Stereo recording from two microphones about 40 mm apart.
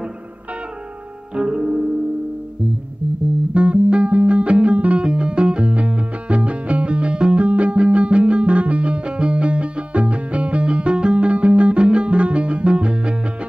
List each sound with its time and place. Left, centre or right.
1.3 s music: centre
3.5 s music: right
5.0 s music: right